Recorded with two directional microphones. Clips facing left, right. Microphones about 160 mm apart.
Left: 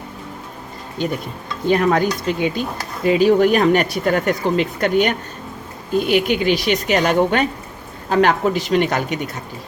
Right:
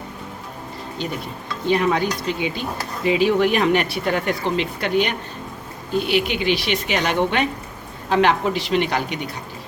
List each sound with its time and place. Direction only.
1.0 s speech: 50° left (ahead or behind)